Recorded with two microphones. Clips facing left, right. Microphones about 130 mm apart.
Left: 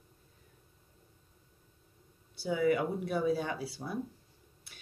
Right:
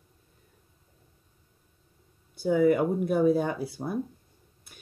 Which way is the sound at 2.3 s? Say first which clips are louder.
Right 7 dB; 50° right (ahead or behind).